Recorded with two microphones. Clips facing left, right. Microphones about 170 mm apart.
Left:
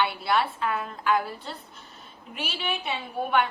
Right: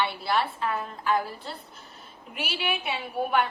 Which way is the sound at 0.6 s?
35° right (ahead or behind).